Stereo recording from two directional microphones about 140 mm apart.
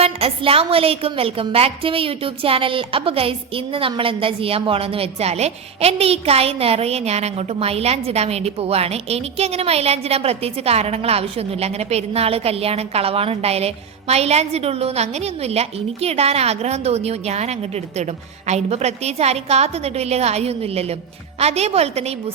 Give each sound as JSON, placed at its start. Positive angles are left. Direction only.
{"t": 0.0, "sound": "a woman's voice", "side_deg": -45}